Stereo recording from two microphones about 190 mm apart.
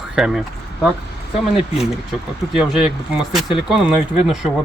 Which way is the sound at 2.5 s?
5° right (ahead or behind).